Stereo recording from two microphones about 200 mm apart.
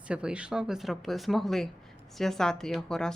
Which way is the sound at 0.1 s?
5° right (ahead or behind).